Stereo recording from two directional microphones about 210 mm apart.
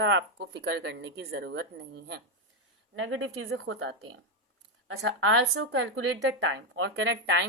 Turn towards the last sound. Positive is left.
turn(degrees=-60)  # may be behind; listen again after turning